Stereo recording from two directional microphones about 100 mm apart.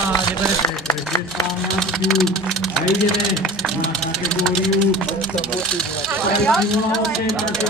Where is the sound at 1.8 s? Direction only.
5° left (ahead or behind).